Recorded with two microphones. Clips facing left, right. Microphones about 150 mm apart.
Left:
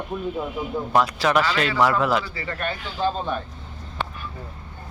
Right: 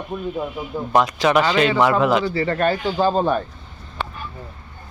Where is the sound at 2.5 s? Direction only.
35° right (ahead or behind).